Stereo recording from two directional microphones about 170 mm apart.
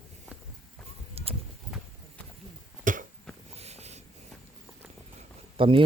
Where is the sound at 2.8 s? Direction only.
50° right (ahead or behind).